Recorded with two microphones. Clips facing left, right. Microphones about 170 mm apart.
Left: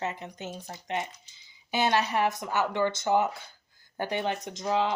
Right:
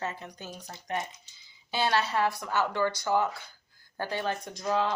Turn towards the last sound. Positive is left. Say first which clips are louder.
# left 1 dB
turn(degrees=15)  # may be behind; listen again after turning